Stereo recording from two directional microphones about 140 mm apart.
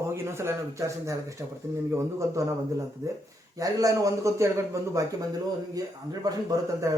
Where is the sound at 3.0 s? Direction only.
20° right (ahead or behind).